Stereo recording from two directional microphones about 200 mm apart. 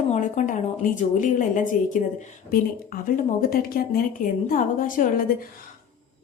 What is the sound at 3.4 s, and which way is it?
A woman's voice, 45° left (ahead or behind).